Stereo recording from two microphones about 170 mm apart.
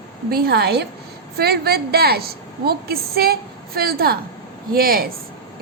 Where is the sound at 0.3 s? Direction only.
65° right (ahead or behind).